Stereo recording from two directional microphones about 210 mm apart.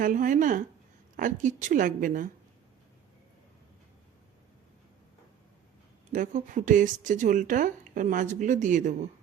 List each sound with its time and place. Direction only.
0.0 s speech: 40° right (ahead or behind)
6.1 s speech: 40° right (ahead or behind)